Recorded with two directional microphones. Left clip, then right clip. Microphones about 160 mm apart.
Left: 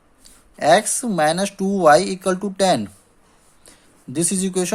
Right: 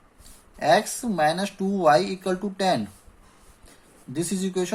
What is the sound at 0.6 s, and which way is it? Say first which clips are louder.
Speech: left 5 dB; 60° left (ahead or behind).